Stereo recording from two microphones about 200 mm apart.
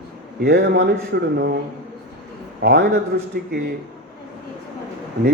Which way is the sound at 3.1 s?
55° right (ahead or behind).